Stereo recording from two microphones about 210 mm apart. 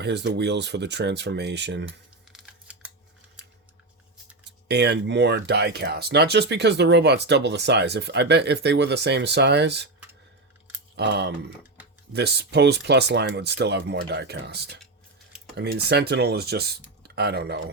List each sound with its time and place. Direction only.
0.0 s speech: 55° right (ahead or behind)
2.3 s scissors: 5° right (ahead or behind)
4.7 s speech: 55° right (ahead or behind)
10.9 s speech: 55° right (ahead or behind)